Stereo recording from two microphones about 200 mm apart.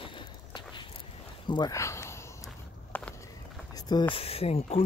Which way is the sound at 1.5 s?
20° left (ahead or behind).